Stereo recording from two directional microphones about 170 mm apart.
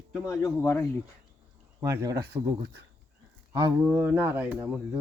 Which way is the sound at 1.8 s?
20° right (ahead or behind).